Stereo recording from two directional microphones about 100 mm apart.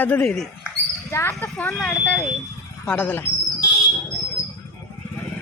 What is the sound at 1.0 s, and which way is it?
Speech, 25° left (ahead or behind).